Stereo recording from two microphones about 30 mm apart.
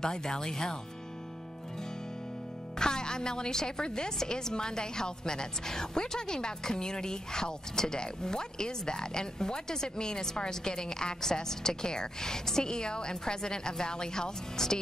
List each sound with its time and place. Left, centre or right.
0.0 s a woman's voice: left
2.8 s a woman's voice: left
14.6 s music: centre